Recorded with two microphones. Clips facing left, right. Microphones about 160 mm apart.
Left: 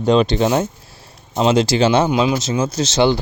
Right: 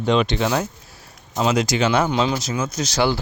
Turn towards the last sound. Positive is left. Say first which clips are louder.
# left 5 dB
turn(degrees=25)  # may be behind; listen again after turning